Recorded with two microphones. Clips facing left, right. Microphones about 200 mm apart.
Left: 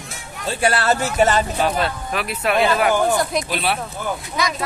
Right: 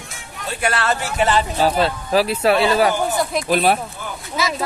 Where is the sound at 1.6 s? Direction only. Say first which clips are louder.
Right 3 dB; 30° right (ahead or behind).